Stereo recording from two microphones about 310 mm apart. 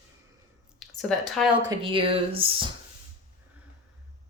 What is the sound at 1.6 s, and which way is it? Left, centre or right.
Speech, centre.